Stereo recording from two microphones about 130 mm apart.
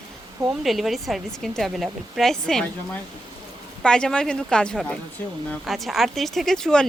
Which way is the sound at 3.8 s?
5° left (ahead or behind).